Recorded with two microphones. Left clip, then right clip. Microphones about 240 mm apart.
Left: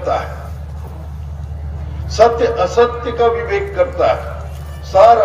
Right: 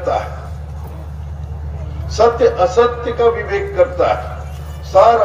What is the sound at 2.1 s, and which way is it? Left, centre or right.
A man's voice, left.